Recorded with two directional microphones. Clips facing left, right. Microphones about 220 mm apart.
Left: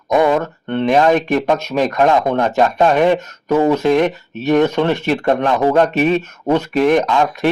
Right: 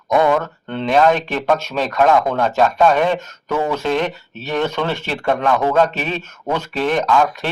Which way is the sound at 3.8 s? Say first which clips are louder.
Left 6 dB; 15° left (ahead or behind).